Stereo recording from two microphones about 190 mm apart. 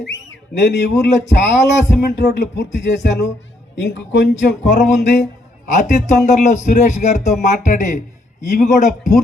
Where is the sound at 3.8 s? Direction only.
70° left (ahead or behind).